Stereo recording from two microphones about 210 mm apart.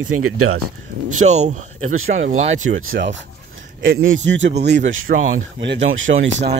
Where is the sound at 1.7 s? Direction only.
75° right (ahead or behind).